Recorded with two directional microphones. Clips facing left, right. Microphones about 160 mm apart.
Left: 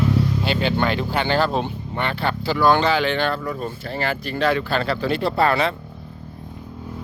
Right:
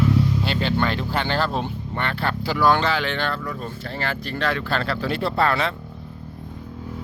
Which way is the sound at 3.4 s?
20° left (ahead or behind).